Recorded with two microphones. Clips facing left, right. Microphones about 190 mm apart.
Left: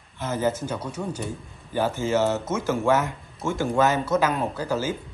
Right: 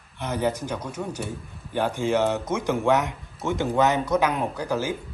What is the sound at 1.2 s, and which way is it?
Speech, 10° left (ahead or behind).